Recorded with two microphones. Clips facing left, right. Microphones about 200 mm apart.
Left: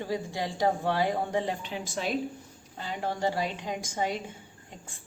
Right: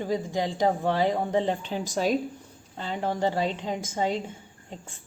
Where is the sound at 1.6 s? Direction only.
35° right (ahead or behind).